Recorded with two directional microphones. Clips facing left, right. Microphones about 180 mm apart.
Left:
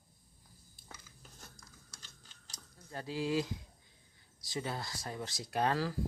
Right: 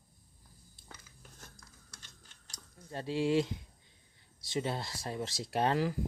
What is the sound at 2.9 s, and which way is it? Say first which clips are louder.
Speech: right 4 dB; 25° right (ahead or behind).